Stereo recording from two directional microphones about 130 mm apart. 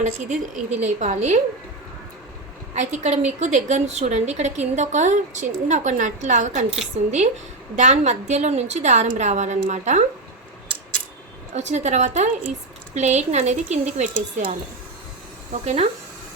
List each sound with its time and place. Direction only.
0.0 s a woman's voice: 65° right (ahead or behind)
2.7 s a woman's voice: 65° right (ahead or behind)
7.0 s a woman's voice: 60° right (ahead or behind)
11.5 s a woman's voice: 60° right (ahead or behind)
15.6 s a woman's voice: 55° right (ahead or behind)